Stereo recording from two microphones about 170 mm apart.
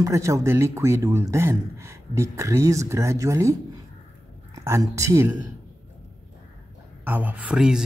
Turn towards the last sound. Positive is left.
turn(degrees=-5)  # may be behind; listen again after turning